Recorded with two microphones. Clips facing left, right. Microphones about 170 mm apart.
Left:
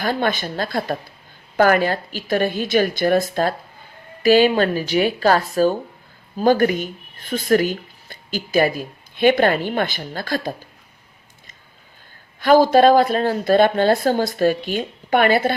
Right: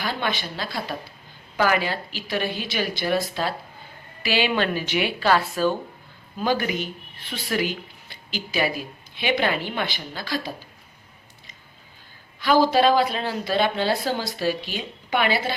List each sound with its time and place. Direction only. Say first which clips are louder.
0.0 s speech: left 6 dB; 45° left (ahead or behind)
12.4 s speech: left 6 dB; 50° left (ahead or behind)